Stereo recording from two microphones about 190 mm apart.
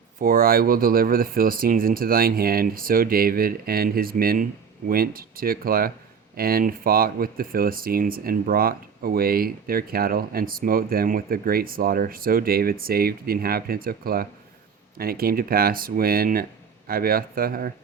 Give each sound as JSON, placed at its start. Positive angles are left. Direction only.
{"t": 0.2, "sound": "speech", "side_deg": -50}